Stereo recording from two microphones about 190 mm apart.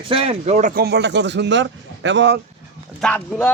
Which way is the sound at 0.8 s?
65° right (ahead or behind).